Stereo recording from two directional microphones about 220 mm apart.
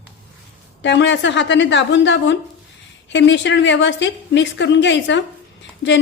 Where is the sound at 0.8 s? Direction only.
55° left (ahead or behind).